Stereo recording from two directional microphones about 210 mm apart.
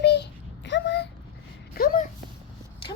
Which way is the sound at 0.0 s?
55° left (ahead or behind).